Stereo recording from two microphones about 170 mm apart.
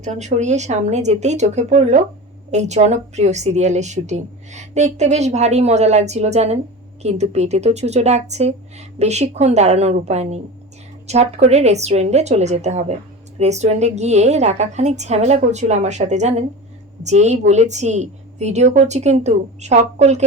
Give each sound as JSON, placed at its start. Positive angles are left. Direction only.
{"t": 0.0, "sound": "a woman's voice", "side_deg": -45}